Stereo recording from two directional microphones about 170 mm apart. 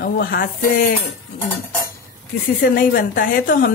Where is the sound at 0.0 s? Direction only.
65° left (ahead or behind).